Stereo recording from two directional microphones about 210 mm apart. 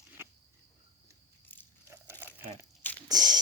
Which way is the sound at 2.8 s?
10° left (ahead or behind).